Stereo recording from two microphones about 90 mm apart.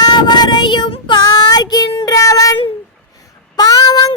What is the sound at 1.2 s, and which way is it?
Child singing, 50° left (ahead or behind).